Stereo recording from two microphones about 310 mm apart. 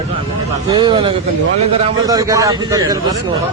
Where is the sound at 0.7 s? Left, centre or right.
Centre.